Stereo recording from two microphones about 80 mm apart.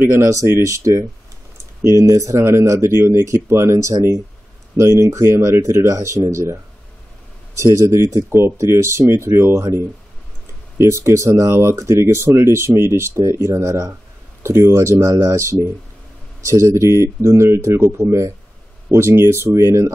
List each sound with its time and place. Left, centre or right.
0.0 s speech: right
0.3 s speech: right
10.8 s speech: right